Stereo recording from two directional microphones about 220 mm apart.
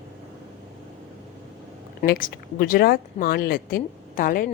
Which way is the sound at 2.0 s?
40° left (ahead or behind).